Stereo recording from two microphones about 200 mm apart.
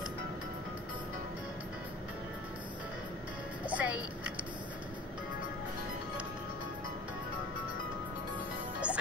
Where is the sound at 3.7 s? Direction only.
5° right (ahead or behind).